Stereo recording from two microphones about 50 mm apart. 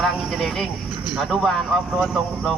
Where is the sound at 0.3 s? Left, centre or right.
Centre.